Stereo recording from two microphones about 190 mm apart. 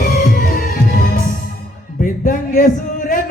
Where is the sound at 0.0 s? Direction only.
50° left (ahead or behind).